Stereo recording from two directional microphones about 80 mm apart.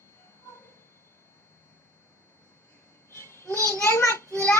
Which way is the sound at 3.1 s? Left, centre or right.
Left.